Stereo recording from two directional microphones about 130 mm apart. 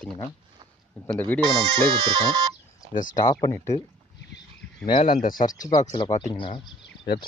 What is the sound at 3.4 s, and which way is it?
Speech, 20° left (ahead or behind).